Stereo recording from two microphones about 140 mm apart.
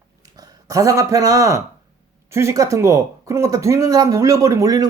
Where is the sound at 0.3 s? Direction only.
25° right (ahead or behind).